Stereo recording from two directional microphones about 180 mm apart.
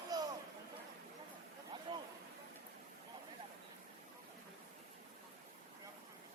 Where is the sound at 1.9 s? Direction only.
25° right (ahead or behind).